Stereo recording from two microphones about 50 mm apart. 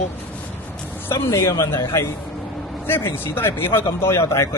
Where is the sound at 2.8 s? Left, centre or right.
Left.